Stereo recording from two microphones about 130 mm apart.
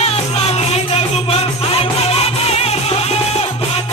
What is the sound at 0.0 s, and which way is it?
Music, 55° left (ahead or behind).